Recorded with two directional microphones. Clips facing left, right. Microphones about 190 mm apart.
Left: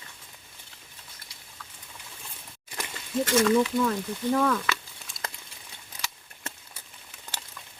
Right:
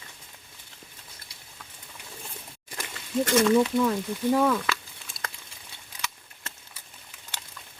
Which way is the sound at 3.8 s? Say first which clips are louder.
Right 2 dB; 10° right (ahead or behind).